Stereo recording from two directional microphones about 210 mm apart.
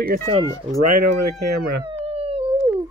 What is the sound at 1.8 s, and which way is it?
Howl, 25° right (ahead or behind).